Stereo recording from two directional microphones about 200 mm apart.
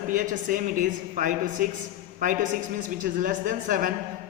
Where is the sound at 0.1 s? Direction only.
40° right (ahead or behind).